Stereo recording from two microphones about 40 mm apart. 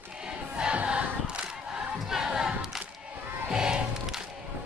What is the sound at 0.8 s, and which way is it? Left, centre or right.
Choir, right.